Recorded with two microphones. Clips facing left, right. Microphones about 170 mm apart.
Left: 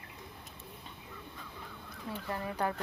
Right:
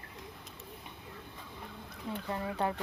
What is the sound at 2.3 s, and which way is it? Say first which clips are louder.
Speech: right 1 dB; 20° right (ahead or behind).